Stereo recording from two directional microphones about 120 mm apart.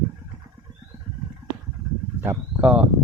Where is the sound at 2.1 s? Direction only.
15° right (ahead or behind).